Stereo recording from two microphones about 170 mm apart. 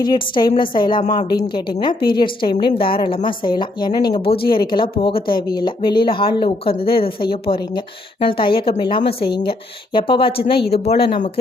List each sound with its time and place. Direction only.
0.0 s speech: 25° left (ahead or behind)